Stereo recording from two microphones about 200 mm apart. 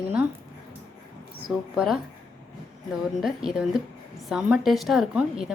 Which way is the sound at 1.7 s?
Centre (ahead or behind).